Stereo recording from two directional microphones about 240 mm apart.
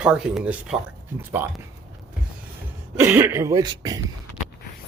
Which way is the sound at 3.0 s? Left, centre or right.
Centre.